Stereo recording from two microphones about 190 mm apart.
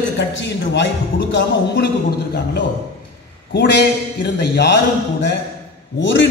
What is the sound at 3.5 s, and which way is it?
Speech, 65° left (ahead or behind).